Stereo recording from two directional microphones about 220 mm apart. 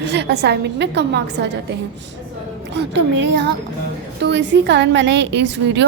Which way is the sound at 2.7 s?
50° right (ahead or behind).